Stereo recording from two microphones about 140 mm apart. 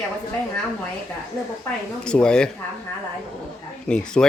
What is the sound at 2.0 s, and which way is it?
Speech, 5° left (ahead or behind).